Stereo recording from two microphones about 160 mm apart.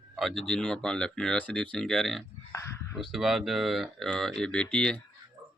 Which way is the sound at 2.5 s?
20° left (ahead or behind).